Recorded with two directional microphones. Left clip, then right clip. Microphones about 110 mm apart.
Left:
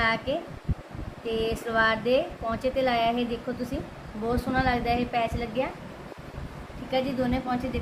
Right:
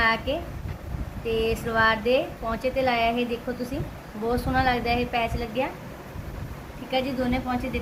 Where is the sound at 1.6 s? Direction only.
10° right (ahead or behind).